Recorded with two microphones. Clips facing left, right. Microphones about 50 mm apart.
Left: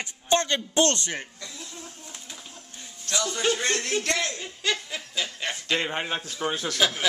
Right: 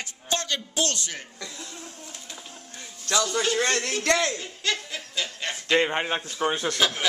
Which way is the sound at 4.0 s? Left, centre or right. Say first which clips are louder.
Right 4 dB; right.